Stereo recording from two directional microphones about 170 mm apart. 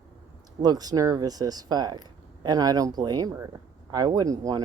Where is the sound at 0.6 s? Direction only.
20° right (ahead or behind).